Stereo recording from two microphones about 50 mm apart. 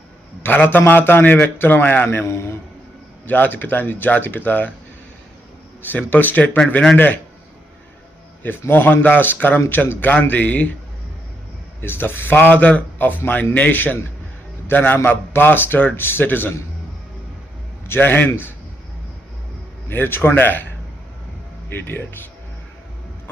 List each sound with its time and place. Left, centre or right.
0.4 s a man's voice: left
2.2 s a man's voice: left
3.2 s speech: left
5.8 s speech: left
8.7 s a man's voice: left
10.1 s speech: left
11.8 s a man's voice: left
13.0 s a man's voice: left
17.8 s a man's voice: left
19.9 s a man's voice: left
21.7 s a man's voice: left